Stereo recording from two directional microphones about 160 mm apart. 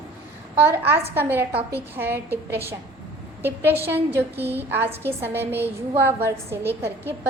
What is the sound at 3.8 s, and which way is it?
A woman's voice, 15° right (ahead or behind).